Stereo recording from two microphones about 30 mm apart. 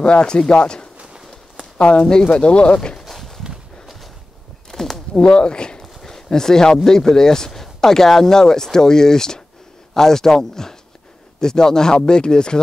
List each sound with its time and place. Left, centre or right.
0.0 s speech: left
3.0 s walk: centre
4.6 s a sound: centre
5.3 s speech: left
6.0 s speech: centre